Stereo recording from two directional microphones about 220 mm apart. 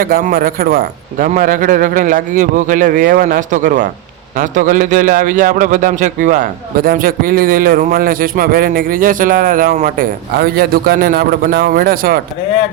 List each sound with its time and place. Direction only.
0.0 s a man's voice: 40° right (ahead or behind)